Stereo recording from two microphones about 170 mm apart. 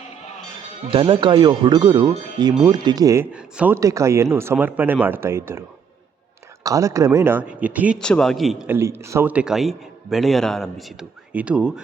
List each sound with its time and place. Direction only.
0.9 s speech: 30° right (ahead or behind)
3.3 s speech: 10° right (ahead or behind)
3.8 s speech: 20° right (ahead or behind)
7.9 s a man's voice: 5° left (ahead or behind)
8.6 s a man's voice: 15° right (ahead or behind)